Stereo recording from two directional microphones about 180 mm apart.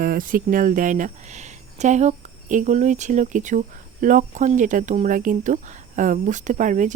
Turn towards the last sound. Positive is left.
turn(degrees=-45)  # may be behind; listen again after turning